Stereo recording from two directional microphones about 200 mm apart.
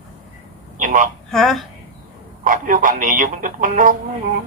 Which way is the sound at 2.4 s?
40° right (ahead or behind).